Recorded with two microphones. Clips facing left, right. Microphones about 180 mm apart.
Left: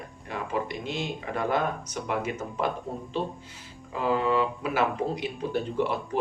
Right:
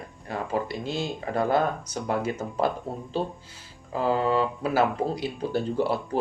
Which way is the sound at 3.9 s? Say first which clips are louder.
Right 1 dB; 35° right (ahead or behind).